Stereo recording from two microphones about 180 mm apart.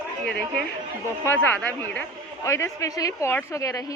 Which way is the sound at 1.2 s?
10° left (ahead or behind).